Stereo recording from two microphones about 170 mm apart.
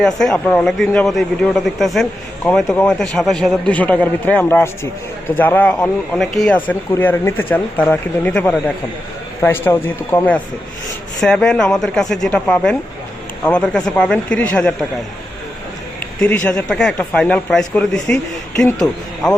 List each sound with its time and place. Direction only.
0.0 s speech: 5° left (ahead or behind)
16.2 s speech: 5° left (ahead or behind)
18.8 s speech: 20° left (ahead or behind)